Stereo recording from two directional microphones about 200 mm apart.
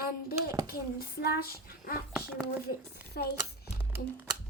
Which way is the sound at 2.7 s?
50° left (ahead or behind).